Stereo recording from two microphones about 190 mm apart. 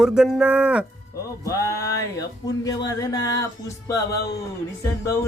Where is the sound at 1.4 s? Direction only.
15° left (ahead or behind).